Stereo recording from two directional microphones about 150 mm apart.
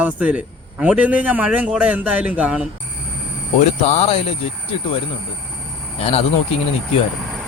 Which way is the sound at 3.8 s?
45° left (ahead or behind).